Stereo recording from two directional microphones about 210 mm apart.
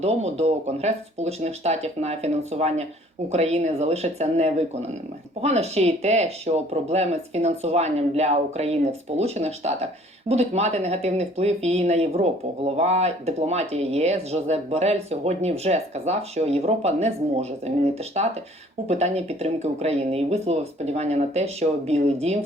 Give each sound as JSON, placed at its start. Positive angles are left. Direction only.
{"t": 0.0, "sound": "speech", "side_deg": -30}